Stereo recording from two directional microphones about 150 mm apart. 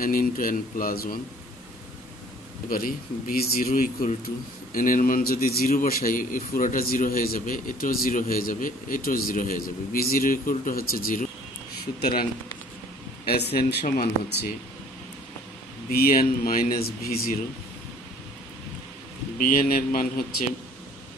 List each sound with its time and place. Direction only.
0.0 s a man's voice: 70° left (ahead or behind)
2.7 s a man's voice: 75° left (ahead or behind)
15.9 s a man's voice: 80° left
19.3 s a man's voice: 70° left (ahead or behind)